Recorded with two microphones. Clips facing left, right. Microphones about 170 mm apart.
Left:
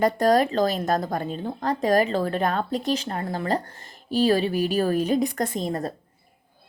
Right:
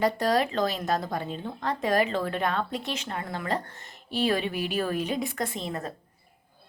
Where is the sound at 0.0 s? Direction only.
45° left (ahead or behind).